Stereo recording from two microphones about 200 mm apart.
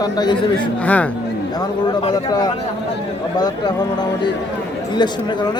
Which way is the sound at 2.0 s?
20° left (ahead or behind).